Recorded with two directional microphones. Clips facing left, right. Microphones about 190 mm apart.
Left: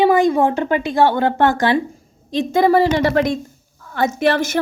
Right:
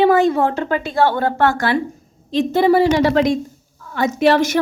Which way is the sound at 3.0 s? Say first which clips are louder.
Right 2 dB; 50° left (ahead or behind).